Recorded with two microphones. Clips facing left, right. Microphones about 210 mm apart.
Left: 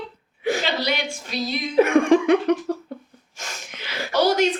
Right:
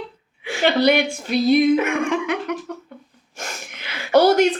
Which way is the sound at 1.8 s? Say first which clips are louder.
Left 6 dB; 35° left (ahead or behind).